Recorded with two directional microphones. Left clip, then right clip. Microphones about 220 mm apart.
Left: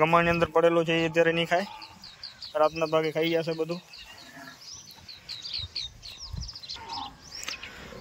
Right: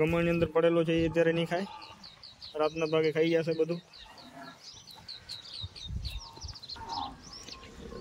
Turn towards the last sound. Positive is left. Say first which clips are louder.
# left 8 dB
turn(degrees=-25)  # may be behind; listen again after turning